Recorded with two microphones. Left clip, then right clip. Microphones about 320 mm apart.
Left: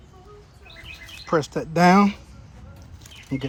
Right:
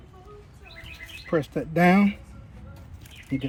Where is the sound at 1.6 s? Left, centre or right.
Centre.